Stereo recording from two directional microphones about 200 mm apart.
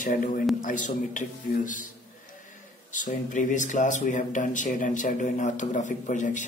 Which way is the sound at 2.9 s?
40° left (ahead or behind).